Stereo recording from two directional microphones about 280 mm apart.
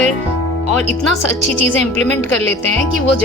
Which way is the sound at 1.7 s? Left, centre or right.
Right.